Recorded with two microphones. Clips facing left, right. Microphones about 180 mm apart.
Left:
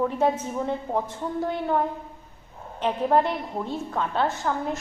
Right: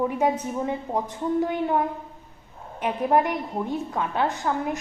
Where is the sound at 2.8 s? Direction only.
10° right (ahead or behind).